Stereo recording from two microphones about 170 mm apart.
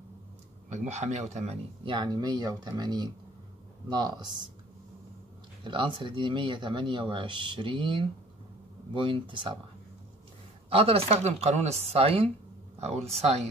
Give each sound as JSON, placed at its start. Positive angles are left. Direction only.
{"t": 0.7, "sound": "speech", "side_deg": -40}
{"t": 1.9, "sound": "speech", "side_deg": -25}
{"t": 5.6, "sound": "speech", "side_deg": -30}
{"t": 10.7, "sound": "speech", "side_deg": -35}